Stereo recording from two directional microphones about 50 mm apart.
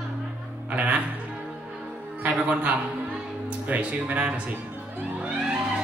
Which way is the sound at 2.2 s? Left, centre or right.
Right.